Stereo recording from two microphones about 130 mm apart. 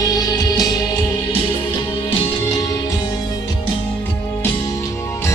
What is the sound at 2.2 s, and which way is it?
Music, 30° left (ahead or behind).